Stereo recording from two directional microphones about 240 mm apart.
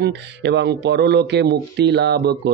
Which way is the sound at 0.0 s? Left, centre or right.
Right.